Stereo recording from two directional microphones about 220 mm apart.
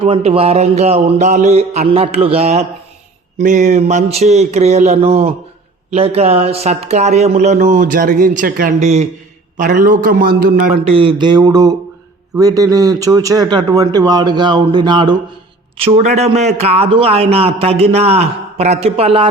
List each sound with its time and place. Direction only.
0.0 s speech: 25° right (ahead or behind); by 10.5 s 45° right (ahead or behind)
10.8 s a man's voice: 25° right (ahead or behind)
16.0 s speech: 30° right (ahead or behind)